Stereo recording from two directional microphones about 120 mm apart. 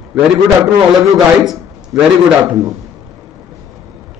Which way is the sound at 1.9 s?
15° right (ahead or behind).